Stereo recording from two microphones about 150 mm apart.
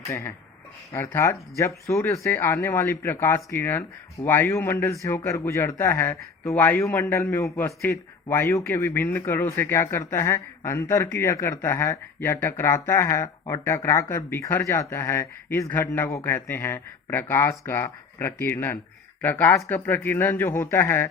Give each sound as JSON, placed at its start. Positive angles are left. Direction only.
{"t": 0.1, "sound": "speech", "side_deg": 15}